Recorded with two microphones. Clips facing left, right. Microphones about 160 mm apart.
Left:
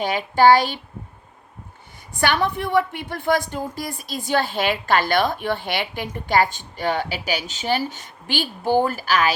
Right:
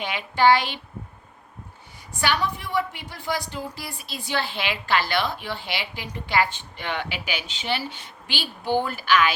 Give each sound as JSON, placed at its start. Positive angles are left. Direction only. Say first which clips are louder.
{"t": 0.0, "sound": "a woman's voice", "louder": "left 4 dB", "side_deg": 40}
{"t": 2.2, "sound": "a woman's voice", "louder": "left 4 dB", "side_deg": 55}